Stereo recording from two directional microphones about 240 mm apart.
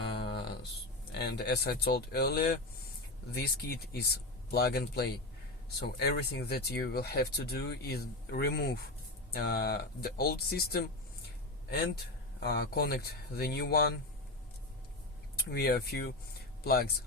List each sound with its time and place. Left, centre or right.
0.2 s music: left
1.2 s speech: left
12.4 s speech: left
15.4 s speech: left